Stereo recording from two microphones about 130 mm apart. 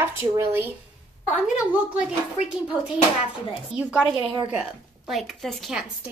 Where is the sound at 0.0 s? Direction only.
20° right (ahead or behind).